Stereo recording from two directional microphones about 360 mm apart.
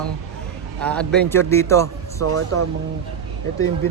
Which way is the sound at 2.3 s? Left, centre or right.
Right.